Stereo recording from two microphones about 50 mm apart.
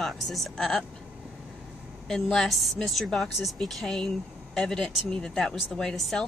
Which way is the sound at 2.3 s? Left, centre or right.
Centre.